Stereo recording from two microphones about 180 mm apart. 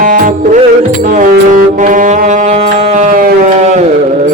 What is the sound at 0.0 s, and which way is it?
Music, 50° right (ahead or behind).